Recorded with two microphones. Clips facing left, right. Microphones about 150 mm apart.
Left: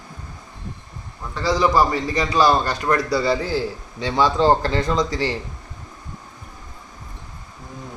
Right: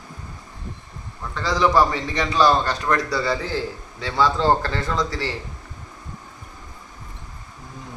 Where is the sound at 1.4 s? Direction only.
10° left (ahead or behind).